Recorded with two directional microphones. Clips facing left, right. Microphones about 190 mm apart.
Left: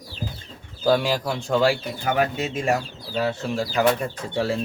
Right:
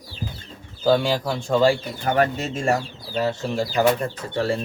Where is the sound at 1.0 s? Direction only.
10° left (ahead or behind).